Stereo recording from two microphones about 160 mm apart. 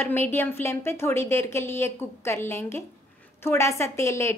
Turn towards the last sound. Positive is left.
turn(degrees=20)  # may be behind; listen again after turning